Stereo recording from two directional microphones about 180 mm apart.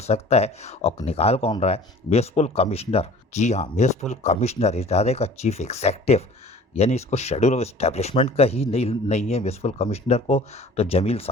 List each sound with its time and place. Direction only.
0.0 s speech: 35° left (ahead or behind)